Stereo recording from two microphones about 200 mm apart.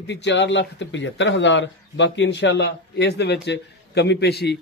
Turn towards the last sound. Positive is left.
turn(degrees=55)  # may be behind; listen again after turning